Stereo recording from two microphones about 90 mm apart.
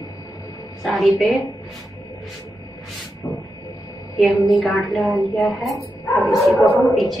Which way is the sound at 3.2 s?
20° left (ahead or behind).